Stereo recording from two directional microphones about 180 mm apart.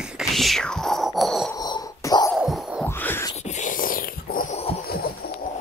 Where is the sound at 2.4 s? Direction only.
5° right (ahead or behind).